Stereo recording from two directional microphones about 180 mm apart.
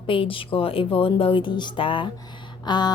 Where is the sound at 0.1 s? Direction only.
30° left (ahead or behind).